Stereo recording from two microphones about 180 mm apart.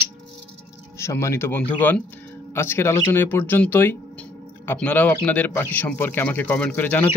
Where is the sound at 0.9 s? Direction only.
15° left (ahead or behind).